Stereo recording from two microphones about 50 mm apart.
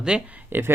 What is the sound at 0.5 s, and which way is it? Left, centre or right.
Speech, right.